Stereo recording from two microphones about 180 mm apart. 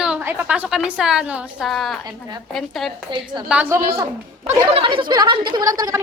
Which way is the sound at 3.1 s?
25° right (ahead or behind).